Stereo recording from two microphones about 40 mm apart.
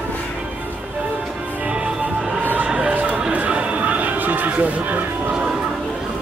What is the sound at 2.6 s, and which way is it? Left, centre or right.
Chatter, right.